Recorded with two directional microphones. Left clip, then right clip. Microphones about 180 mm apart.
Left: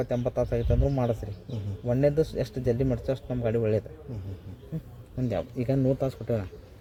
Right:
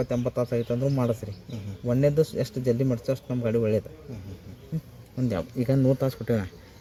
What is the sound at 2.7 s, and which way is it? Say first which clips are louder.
A man's voice: right 1 dB; 25° right (ahead or behind).